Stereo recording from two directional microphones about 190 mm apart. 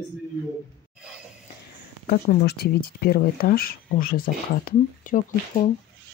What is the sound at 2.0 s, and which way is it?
Speech, 55° left (ahead or behind).